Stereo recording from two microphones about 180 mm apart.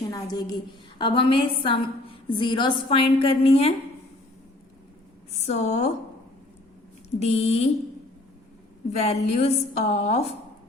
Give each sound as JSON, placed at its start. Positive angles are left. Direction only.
{"t": 0.1, "sound": "a woman's voice", "side_deg": 20}
{"t": 5.5, "sound": "a woman's voice", "side_deg": 40}
{"t": 7.2, "sound": "a woman's voice", "side_deg": 35}
{"t": 8.9, "sound": "a woman's voice", "side_deg": 35}